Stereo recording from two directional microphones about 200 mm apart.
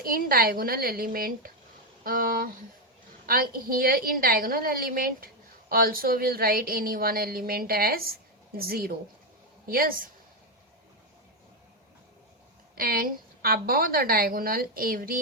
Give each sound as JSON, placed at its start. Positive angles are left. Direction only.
{"t": 0.0, "sound": "a woman's voice", "side_deg": -50}
{"t": 12.7, "sound": "a woman's voice", "side_deg": -45}